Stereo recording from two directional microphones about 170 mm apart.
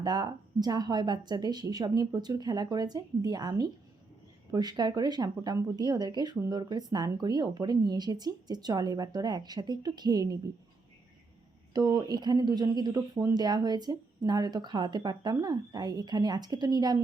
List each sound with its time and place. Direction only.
0.0 s speech: 25° right (ahead or behind)
11.7 s speech: 20° right (ahead or behind)